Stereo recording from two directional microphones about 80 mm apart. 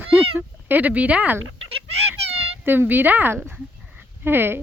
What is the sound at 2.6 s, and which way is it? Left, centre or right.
Speech, right.